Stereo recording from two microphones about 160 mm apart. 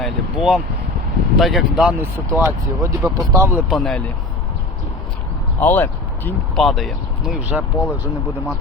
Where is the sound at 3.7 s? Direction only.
5° left (ahead or behind).